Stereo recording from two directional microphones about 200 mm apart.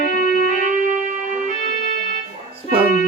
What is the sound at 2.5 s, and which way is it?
Music, 30° right (ahead or behind).